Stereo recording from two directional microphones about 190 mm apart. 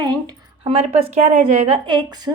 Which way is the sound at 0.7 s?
35° right (ahead or behind).